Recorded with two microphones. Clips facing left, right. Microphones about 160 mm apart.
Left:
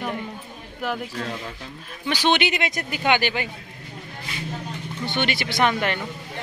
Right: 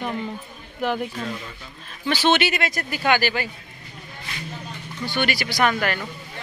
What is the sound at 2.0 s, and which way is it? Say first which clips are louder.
Speech: right 1 dB; 15° left (ahead or behind).